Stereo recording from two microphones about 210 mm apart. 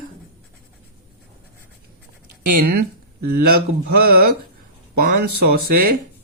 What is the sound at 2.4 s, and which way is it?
Speech, 45° right (ahead or behind).